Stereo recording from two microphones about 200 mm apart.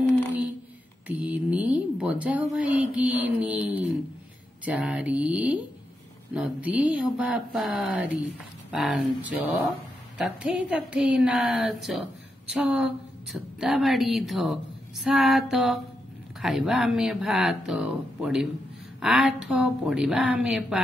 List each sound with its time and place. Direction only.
1.0 s a woman's voice: 5° right (ahead or behind)